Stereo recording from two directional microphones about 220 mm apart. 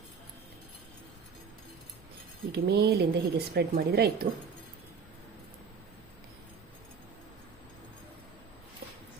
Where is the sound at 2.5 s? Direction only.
50° right (ahead or behind).